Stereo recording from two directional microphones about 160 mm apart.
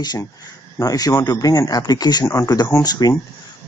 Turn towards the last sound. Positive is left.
turn(degrees=25)  # may be behind; listen again after turning